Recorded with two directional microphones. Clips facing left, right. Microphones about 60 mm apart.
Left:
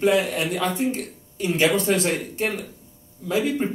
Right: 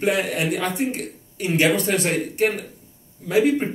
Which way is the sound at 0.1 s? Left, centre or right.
Right.